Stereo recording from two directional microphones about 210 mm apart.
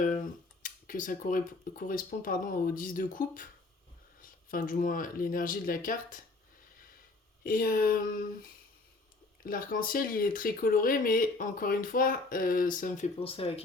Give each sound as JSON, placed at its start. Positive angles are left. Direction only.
{"t": 0.6, "sound": "speech", "side_deg": 40}
{"t": 7.4, "sound": "a sound", "side_deg": 40}
{"t": 9.4, "sound": "speech", "side_deg": 40}
{"t": 13.1, "sound": "speech", "side_deg": 25}